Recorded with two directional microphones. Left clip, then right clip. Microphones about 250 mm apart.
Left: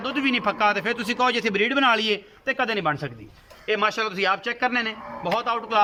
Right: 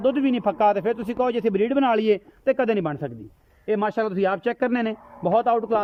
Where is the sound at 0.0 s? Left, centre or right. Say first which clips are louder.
Right 2 dB; right.